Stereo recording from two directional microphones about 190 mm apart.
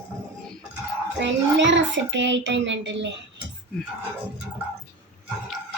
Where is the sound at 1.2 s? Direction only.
70° right (ahead or behind).